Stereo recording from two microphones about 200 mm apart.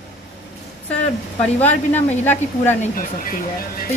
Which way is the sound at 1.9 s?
10° left (ahead or behind).